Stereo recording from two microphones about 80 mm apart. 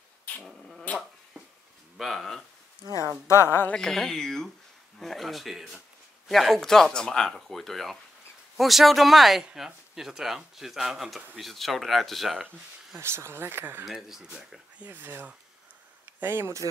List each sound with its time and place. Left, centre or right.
0.5 s dog: centre
2.0 s speech: centre
3.3 s a woman's voice: left
3.7 s speech: centre
12.4 s speech: right
13.8 s speech: centre
14.9 s speech: right